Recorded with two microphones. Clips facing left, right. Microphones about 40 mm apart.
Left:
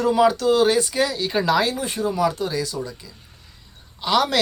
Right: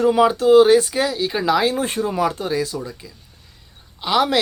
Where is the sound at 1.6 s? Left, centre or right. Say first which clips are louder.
Right 3 dB; right.